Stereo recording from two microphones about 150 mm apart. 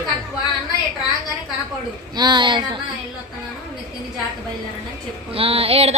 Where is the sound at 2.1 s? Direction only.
30° right (ahead or behind).